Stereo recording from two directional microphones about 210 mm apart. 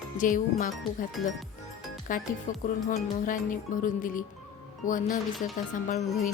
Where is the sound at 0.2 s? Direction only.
40° left (ahead or behind).